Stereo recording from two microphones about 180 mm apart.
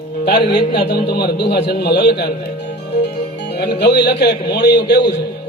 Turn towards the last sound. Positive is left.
turn(degrees=65)  # may be behind; listen again after turning